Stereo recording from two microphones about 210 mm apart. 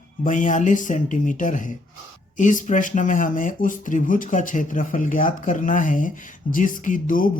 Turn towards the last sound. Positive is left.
turn(degrees=40)  # may be behind; listen again after turning